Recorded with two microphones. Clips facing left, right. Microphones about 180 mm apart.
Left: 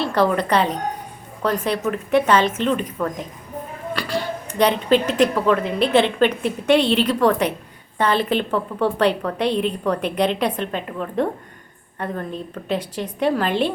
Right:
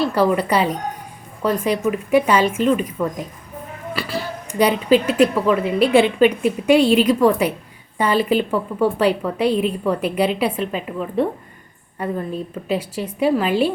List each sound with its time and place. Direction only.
0.1 s speech: 10° right (ahead or behind)